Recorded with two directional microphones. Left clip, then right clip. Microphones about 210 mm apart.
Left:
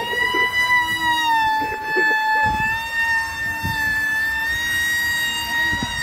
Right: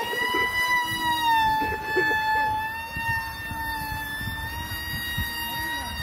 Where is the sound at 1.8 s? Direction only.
10° right (ahead or behind).